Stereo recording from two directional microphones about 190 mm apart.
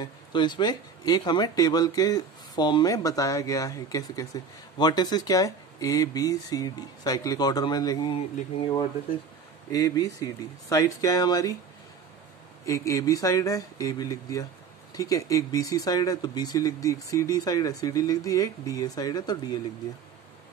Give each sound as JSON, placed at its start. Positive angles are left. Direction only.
{"t": 0.0, "sound": "speech", "side_deg": 25}
{"t": 9.7, "sound": "speech", "side_deg": 20}
{"t": 12.6, "sound": "speech", "side_deg": 15}